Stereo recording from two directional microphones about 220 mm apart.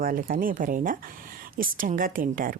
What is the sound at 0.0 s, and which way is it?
Speech, 40° right (ahead or behind).